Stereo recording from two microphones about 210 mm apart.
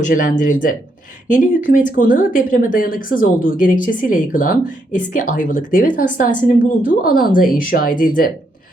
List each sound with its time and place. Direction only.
0.0 s speech: 40° left (ahead or behind)